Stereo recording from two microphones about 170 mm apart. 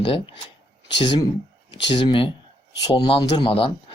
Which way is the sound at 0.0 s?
30° left (ahead or behind).